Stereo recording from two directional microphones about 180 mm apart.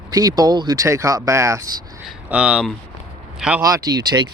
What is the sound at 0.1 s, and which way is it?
Speech, 20° right (ahead or behind).